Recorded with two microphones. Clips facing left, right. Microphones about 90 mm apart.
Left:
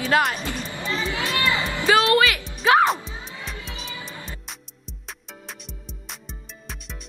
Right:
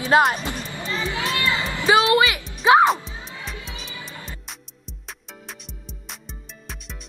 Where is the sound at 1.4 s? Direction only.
20° left (ahead or behind).